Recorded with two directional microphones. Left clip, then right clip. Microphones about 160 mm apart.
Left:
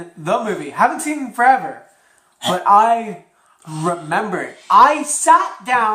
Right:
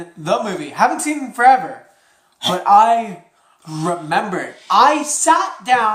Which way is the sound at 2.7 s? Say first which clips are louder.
Right 2 dB; 35° right (ahead or behind).